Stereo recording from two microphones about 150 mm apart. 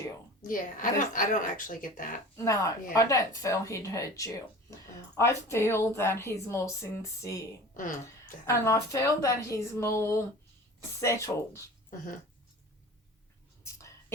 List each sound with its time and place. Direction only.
0.4 s speech: 65° left (ahead or behind)
2.3 s a woman's voice: 20° left (ahead or behind)
8.4 s a woman's voice: 20° left (ahead or behind)